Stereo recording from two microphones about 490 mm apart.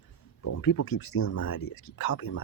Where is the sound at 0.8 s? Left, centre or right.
Left.